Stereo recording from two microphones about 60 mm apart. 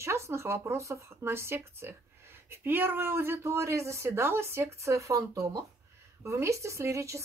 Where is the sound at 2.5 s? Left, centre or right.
Right.